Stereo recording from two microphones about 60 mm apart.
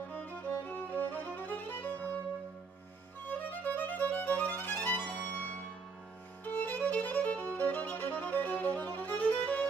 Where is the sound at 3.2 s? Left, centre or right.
Left.